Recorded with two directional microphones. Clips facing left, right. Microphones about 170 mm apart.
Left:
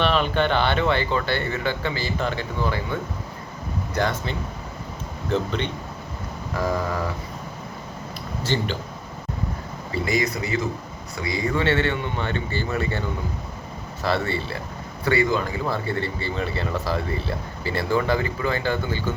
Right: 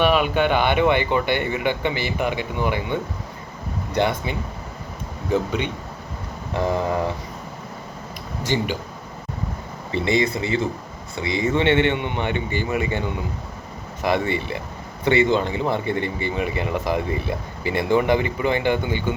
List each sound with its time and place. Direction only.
0.0 s speech: 10° right (ahead or behind)
6.5 s speech: 25° right (ahead or behind)
8.4 s speech: 10° right (ahead or behind)
9.9 s speech: 25° right (ahead or behind)